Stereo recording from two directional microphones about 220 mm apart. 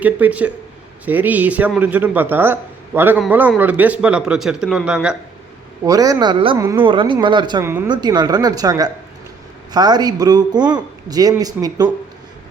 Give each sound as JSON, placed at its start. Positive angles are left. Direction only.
{"t": 0.0, "sound": "speech", "side_deg": -5}
{"t": 5.8, "sound": "speech", "side_deg": -15}